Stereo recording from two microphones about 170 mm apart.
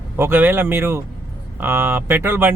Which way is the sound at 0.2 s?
10° right (ahead or behind).